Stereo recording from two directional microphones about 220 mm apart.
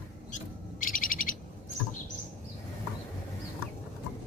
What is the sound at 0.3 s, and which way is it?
Owl, 40° left (ahead or behind).